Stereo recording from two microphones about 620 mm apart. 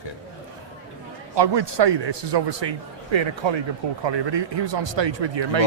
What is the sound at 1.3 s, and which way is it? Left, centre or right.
A man's voice, right.